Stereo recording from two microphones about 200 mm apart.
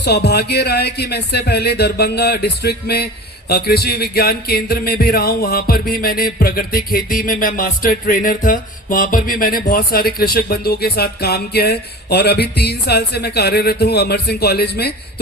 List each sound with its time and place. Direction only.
0.0 s speech: 55° left (ahead or behind)